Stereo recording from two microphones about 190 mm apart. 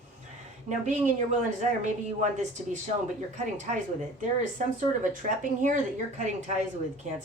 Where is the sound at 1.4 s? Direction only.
40° right (ahead or behind).